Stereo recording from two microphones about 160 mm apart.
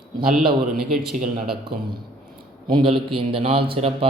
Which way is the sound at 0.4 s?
70° right (ahead or behind).